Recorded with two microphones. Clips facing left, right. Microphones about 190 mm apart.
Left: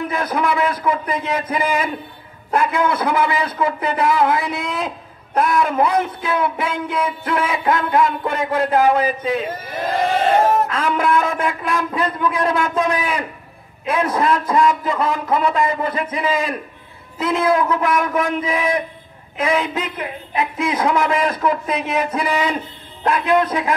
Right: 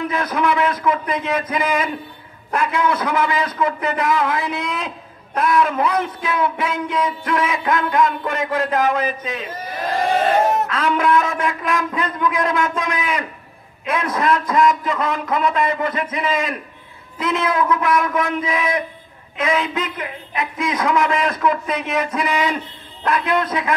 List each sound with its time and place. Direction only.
0.1 s a man's voice: 30° left (ahead or behind)
10.6 s a man's voice: 30° left (ahead or behind)